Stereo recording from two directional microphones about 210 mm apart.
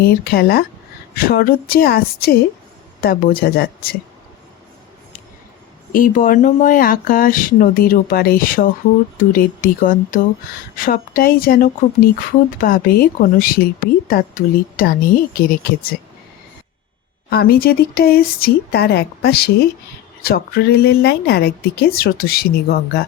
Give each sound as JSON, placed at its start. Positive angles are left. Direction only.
{"t": 0.0, "sound": "speech", "side_deg": 45}
{"t": 5.9, "sound": "speech", "side_deg": 40}
{"t": 17.2, "sound": "speech", "side_deg": 45}